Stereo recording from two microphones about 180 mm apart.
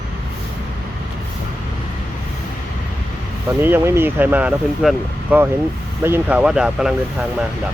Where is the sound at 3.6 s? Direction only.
10° right (ahead or behind).